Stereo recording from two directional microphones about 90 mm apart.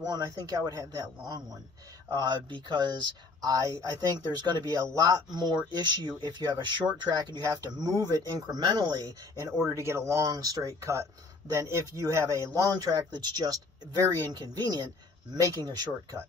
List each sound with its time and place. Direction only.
0.0 s speech: 45° right (ahead or behind)
2.5 s speech: 60° right (ahead or behind)
3.3 s speech: 40° right (ahead or behind)
9.6 s speech: 30° right (ahead or behind)